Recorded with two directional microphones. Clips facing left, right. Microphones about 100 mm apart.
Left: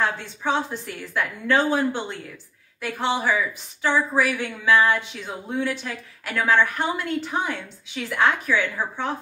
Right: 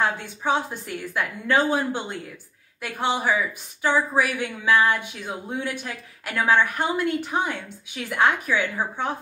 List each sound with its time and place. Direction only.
0.0 s speech: 15° right (ahead or behind)